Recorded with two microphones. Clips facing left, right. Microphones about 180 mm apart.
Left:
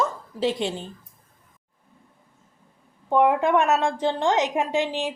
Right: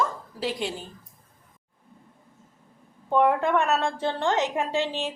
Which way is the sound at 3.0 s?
15° left (ahead or behind).